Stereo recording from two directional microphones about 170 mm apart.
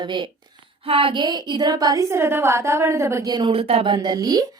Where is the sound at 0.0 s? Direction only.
25° right (ahead or behind).